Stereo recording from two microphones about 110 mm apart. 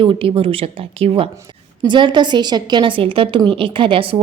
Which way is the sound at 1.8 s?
45° right (ahead or behind).